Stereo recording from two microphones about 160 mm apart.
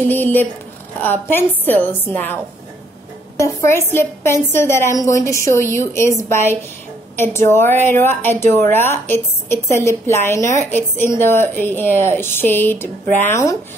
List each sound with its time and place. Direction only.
0.1 s a woman's voice: 10° left (ahead or behind)
3.3 s a woman's voice: 15° left (ahead or behind)